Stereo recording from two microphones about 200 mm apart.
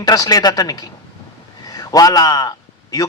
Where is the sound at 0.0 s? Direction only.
20° left (ahead or behind).